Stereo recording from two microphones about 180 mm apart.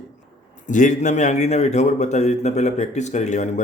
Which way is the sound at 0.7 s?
45° left (ahead or behind).